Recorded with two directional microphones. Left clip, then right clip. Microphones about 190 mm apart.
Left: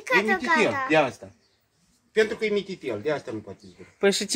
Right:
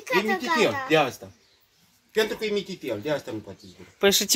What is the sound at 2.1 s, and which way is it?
A man's voice, 60° right (ahead or behind).